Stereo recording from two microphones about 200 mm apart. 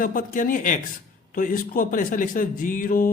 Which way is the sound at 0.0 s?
45° left (ahead or behind).